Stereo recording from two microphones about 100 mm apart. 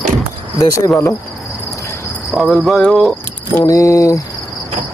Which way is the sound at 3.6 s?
35° left (ahead or behind).